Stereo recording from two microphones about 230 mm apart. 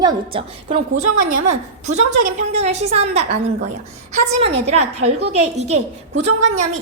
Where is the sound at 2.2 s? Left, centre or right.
Right.